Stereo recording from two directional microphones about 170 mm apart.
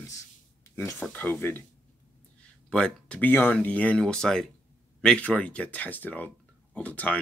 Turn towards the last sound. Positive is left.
turn(degrees=10)  # may be behind; listen again after turning